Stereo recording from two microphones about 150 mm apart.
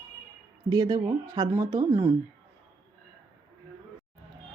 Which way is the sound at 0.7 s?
25° right (ahead or behind).